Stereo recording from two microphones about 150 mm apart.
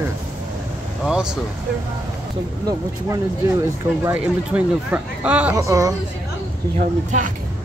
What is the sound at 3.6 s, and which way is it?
Speech, 15° right (ahead or behind).